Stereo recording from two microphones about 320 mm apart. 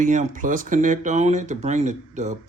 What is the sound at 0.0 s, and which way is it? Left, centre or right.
Speech, right.